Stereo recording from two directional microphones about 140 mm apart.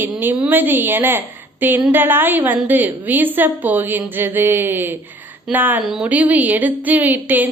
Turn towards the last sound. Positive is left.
turn(degrees=-10)  # may be behind; listen again after turning